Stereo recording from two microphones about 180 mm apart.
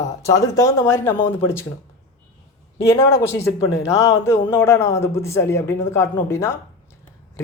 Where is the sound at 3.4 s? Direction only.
30° left (ahead or behind).